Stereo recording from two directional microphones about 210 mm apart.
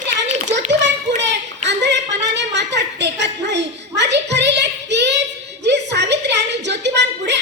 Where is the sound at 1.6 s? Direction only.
55° right (ahead or behind).